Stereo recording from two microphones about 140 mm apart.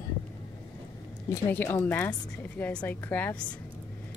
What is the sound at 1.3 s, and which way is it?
A woman's voice, 15° left (ahead or behind).